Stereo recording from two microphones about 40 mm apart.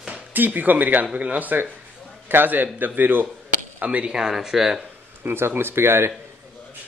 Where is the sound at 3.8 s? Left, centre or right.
Right.